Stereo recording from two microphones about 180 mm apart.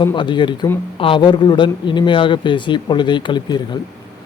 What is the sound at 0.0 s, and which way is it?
Speech, 25° left (ahead or behind).